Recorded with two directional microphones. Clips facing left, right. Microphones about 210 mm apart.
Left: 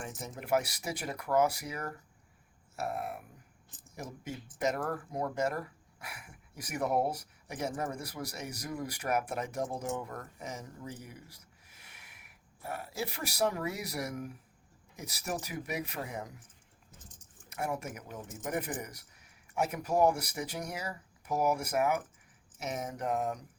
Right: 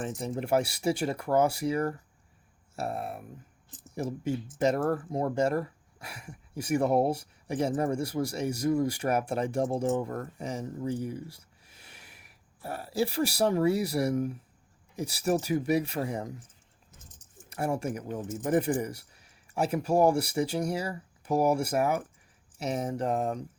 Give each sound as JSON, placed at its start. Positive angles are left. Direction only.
{"t": 0.0, "sound": "speech", "side_deg": -30}
{"t": 17.5, "sound": "speech", "side_deg": -30}